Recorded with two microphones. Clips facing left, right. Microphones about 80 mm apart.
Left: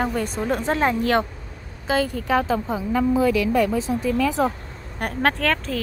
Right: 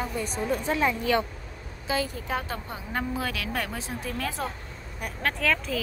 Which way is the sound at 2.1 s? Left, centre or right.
Left.